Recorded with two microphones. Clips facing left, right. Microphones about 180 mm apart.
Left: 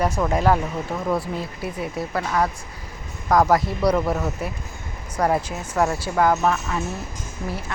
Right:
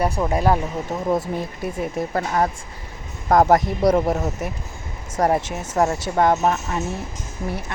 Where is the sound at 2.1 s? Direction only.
35° right (ahead or behind).